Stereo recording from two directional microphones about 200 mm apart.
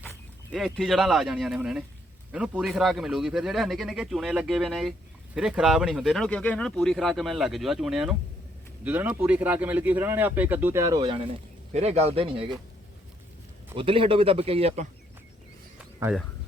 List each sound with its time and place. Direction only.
0.5 s speech: centre (ahead or behind); by 11.2 s 20° right (ahead or behind)
11.7 s speech: 35° right (ahead or behind)
13.7 s speech: 25° right (ahead or behind)
15.8 s a sound: 5° right (ahead or behind)